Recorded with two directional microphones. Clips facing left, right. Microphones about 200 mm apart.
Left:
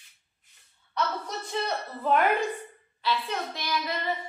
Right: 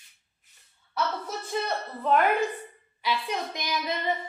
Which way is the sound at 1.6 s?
Centre (ahead or behind).